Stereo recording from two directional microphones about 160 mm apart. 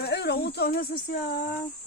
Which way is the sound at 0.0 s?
90° left.